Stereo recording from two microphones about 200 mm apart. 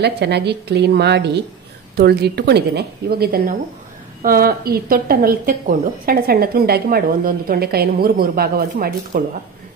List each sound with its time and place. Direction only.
0.0 s a woman's voice: 55° right (ahead or behind)